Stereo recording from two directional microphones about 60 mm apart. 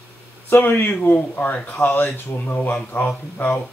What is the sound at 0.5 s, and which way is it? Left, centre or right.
Speech, left.